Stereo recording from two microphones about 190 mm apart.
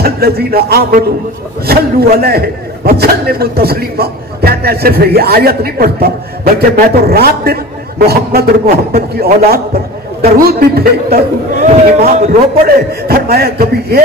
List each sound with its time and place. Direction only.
0.0 s a man's voice: 55° right (ahead or behind); by 12.4 s 35° right (ahead or behind)
12.6 s a man's voice: 55° right (ahead or behind)